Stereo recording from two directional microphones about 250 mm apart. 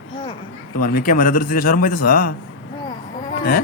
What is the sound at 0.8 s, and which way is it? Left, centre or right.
A man's voice, left.